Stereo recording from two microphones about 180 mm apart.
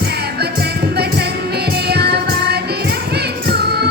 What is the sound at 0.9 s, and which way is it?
Music, 65° right (ahead or behind).